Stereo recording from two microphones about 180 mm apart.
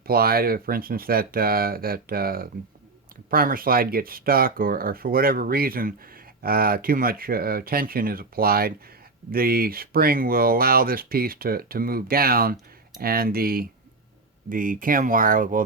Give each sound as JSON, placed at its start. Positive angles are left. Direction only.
{"t": 0.1, "sound": "speech", "side_deg": -55}